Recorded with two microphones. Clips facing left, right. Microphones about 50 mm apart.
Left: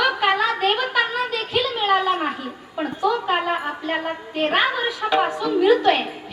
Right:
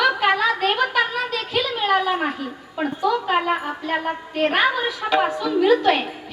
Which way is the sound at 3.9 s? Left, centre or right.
Left.